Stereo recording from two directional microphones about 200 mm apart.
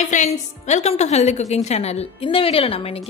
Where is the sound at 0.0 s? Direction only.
35° left (ahead or behind).